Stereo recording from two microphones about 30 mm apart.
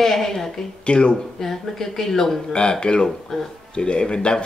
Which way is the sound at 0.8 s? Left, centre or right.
Left.